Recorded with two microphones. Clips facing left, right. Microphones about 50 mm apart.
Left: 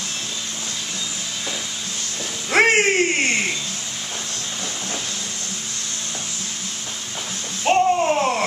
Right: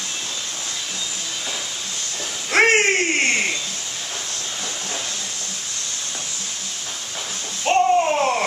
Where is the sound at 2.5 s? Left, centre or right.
Centre.